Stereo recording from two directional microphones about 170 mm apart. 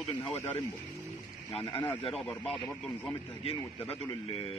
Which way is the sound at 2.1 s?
5° left (ahead or behind).